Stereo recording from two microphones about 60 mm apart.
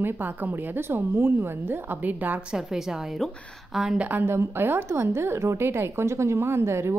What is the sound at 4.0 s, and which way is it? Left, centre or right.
Speech, right.